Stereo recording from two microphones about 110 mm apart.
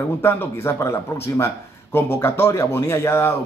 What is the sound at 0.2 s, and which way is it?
Speech, 20° left (ahead or behind).